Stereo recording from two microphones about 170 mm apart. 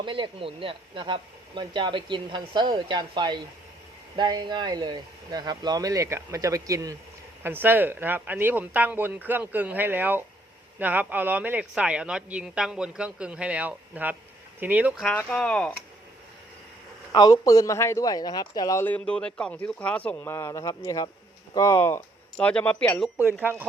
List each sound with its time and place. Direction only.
0.0 s speech: 30° right (ahead or behind); by 15.0 s 10° right (ahead or behind)
15.0 s speech: 10° left (ahead or behind)
17.1 s speech: 20° left (ahead or behind)
22.4 s speech: 5° left (ahead or behind)
23.0 s speech: 10° right (ahead or behind)